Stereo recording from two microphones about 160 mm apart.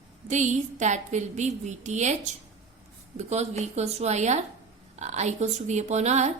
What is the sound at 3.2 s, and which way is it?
A woman's voice, 45° right (ahead or behind).